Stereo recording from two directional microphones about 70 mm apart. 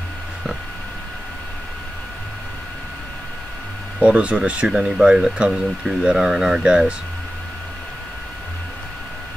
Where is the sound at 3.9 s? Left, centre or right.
Centre.